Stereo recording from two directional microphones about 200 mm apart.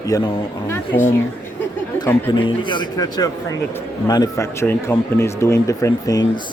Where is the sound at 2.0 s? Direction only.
10° left (ahead or behind).